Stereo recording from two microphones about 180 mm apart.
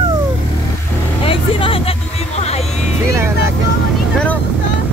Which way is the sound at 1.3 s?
30° left (ahead or behind).